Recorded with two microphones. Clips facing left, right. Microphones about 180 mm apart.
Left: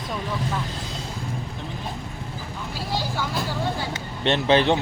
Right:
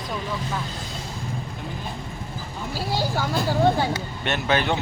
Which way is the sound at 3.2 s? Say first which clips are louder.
Right 5 dB; 50° right (ahead or behind).